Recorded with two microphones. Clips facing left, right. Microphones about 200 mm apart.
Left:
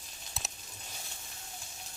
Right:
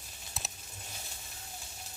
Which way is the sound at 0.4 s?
Centre (ahead or behind).